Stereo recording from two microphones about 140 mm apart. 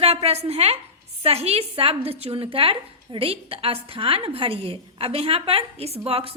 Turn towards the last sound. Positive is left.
turn(degrees=-45)  # may be behind; listen again after turning